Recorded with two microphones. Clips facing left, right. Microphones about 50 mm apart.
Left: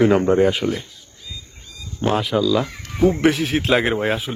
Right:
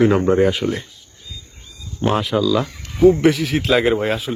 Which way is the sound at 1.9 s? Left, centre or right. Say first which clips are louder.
Right 1 dB; centre.